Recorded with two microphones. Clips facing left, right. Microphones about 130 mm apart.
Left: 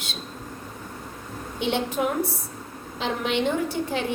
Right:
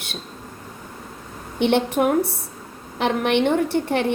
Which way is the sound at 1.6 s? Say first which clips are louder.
Right 6 dB; 65° right (ahead or behind).